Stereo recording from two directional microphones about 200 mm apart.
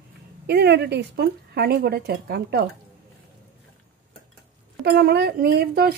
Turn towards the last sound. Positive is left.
turn(degrees=-50)  # may be behind; listen again after turning